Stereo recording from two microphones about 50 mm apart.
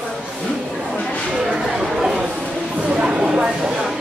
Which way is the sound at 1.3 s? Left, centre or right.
Centre.